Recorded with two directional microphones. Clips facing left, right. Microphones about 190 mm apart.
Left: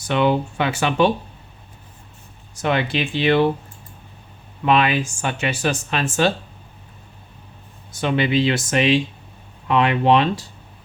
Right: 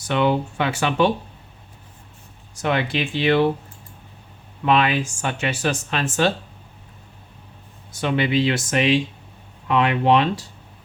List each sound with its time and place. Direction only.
0.1 s speech: 15° left (ahead or behind)
2.6 s speech: 25° left (ahead or behind)
4.6 s speech: 15° left (ahead or behind)
8.0 s speech: 25° left (ahead or behind)